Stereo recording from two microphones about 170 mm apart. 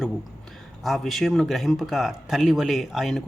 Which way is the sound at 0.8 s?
Centre (ahead or behind).